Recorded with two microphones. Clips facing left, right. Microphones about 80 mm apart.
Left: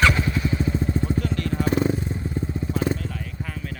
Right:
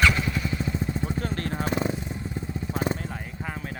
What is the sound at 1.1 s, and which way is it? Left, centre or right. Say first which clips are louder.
Vehicle: left 4 dB; right.